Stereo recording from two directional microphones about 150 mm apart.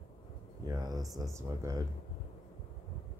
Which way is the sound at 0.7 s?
25° right (ahead or behind).